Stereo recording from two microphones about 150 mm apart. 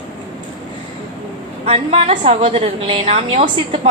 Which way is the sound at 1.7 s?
45° right (ahead or behind).